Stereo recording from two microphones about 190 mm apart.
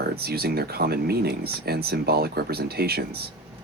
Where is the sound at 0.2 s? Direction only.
55° right (ahead or behind).